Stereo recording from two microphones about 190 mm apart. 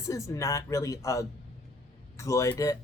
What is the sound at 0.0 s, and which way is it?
Speech, 15° left (ahead or behind).